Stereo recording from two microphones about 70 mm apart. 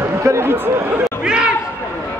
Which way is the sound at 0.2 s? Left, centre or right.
Right.